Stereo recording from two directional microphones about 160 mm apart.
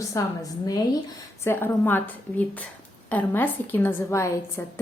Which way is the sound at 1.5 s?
15° left (ahead or behind).